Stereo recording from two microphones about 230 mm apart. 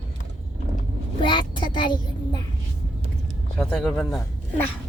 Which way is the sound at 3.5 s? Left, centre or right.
Centre.